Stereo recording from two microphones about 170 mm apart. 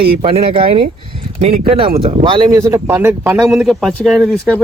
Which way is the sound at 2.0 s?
35° right (ahead or behind).